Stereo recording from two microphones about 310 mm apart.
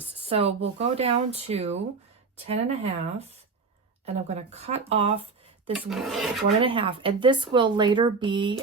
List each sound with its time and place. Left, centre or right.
0.2 s speech: centre
5.7 s rub: centre
6.6 s speech: centre